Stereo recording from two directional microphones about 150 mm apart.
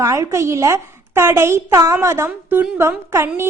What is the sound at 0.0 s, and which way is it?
A woman's voice, 20° right (ahead or behind).